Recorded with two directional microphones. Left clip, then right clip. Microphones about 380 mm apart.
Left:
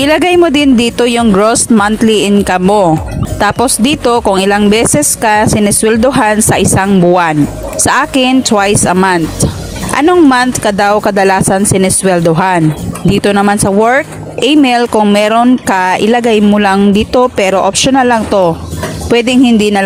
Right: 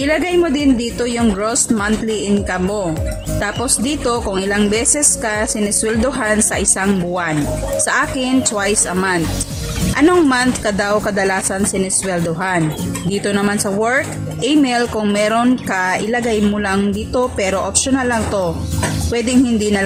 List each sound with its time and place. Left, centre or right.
0.0 s speech: left